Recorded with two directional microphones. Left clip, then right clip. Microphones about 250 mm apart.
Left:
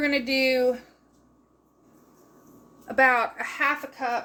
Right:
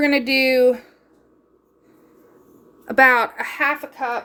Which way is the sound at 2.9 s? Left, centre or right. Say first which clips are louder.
Right 6 dB; right.